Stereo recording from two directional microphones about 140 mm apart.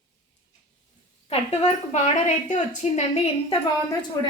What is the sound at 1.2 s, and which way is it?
A woman's voice, 50° left (ahead or behind).